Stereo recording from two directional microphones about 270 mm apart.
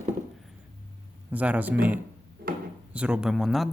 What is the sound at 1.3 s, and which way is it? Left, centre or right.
A man's voice, centre.